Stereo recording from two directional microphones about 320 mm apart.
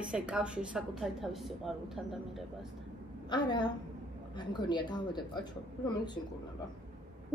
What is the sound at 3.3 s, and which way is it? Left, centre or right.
Speech, centre.